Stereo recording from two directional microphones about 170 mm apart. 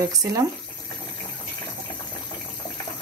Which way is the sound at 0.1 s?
20° right (ahead or behind).